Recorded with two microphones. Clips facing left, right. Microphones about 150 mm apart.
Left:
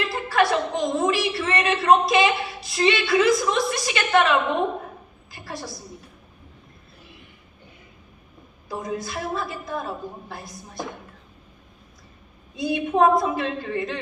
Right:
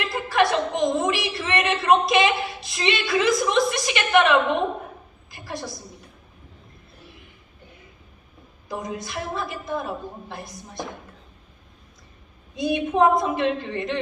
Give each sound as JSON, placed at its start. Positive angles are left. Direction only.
{"t": 0.5, "sound": "a woman's voice", "side_deg": -20}
{"t": 5.3, "sound": "a sound", "side_deg": -20}
{"t": 8.7, "sound": "a woman's voice", "side_deg": -20}
{"t": 12.5, "sound": "a woman's voice", "side_deg": -25}